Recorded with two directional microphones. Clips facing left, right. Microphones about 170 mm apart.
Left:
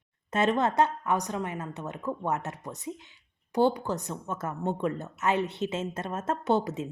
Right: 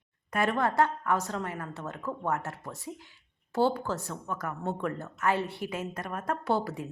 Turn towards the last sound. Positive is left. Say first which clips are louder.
# left 3 dB
turn(degrees=20)  # may be behind; listen again after turning